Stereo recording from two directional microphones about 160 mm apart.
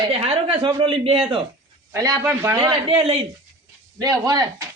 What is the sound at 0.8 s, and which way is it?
Speech, 35° right (ahead or behind).